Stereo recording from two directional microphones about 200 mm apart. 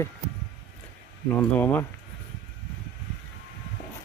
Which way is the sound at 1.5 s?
10° left (ahead or behind).